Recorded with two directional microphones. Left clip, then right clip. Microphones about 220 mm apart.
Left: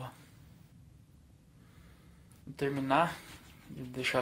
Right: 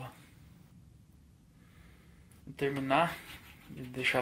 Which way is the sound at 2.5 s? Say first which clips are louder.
Even; centre (ahead or behind).